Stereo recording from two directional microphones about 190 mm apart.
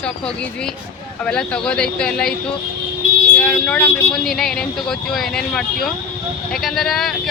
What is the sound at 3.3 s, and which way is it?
Speech, 5° left (ahead or behind).